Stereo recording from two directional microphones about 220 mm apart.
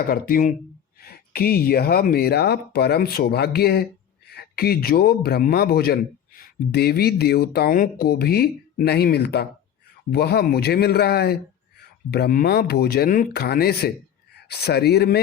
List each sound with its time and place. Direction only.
0.1 s a man's voice: 40° left (ahead or behind)